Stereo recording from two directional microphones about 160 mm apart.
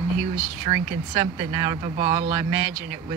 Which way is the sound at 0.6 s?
30° right (ahead or behind).